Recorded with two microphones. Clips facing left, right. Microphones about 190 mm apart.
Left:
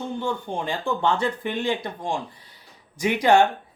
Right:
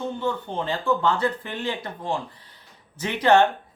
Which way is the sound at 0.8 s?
25° left (ahead or behind).